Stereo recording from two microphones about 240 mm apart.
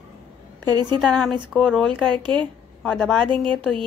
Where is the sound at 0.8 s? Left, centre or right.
Centre.